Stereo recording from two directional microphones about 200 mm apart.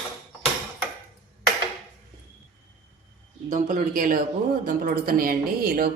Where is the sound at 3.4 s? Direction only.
40° right (ahead or behind).